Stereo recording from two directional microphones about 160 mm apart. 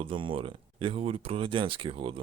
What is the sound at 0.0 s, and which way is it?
Speech, 35° right (ahead or behind).